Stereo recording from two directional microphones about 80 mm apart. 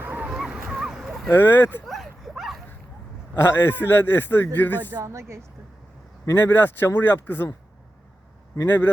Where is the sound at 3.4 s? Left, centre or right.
Left.